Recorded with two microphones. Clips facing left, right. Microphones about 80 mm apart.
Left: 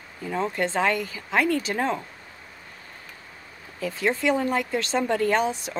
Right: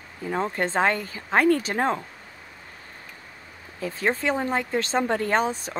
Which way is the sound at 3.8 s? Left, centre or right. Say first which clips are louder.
Left 1 dB; right.